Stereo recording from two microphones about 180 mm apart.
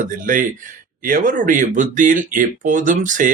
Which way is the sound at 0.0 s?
50° right (ahead or behind).